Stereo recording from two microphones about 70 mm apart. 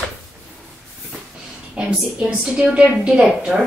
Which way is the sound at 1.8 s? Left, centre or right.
Centre.